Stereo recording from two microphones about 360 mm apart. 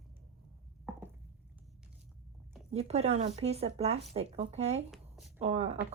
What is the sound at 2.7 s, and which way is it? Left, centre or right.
Speech, centre.